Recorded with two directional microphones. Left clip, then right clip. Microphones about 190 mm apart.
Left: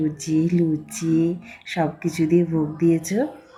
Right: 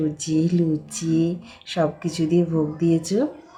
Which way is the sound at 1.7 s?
15° right (ahead or behind).